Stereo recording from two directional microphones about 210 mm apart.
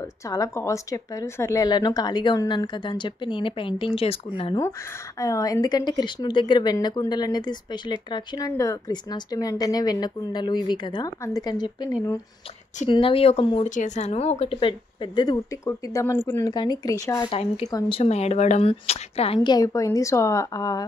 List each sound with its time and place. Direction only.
0.3 s speech: 15° left (ahead or behind)
5.2 s a woman's voice: 15° left (ahead or behind)